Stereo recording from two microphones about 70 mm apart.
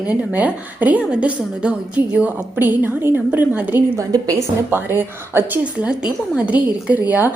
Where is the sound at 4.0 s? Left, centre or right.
Right.